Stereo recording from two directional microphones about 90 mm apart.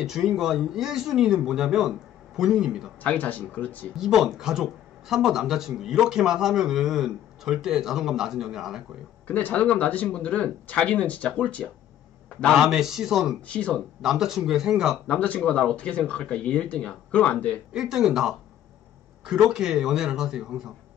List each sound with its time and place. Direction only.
0.0 s speech: 5° right (ahead or behind)
3.0 s speech: 20° left (ahead or behind)
3.9 s speech: 5° right (ahead or behind)
9.3 s speech: 15° left (ahead or behind)
12.5 s speech: 5° right (ahead or behind)
13.5 s speech: 10° left (ahead or behind)
13.7 s speech: 5° right (ahead or behind)
15.0 s speech: 15° left (ahead or behind)
17.7 s speech: 5° right (ahead or behind)